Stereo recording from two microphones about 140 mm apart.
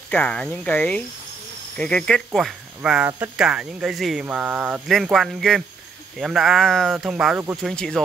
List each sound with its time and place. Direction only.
0.1 s speech: 10° left (ahead or behind); by 4.8 s 10° right (ahead or behind)
4.8 s speech: centre (ahead or behind)